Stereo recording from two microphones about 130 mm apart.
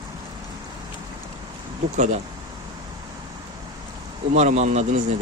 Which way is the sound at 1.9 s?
65° right (ahead or behind).